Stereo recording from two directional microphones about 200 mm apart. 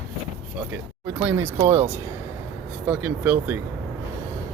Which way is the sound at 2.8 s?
10° right (ahead or behind).